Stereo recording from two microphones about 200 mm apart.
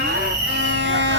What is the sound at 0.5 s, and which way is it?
Music, 65° right (ahead or behind).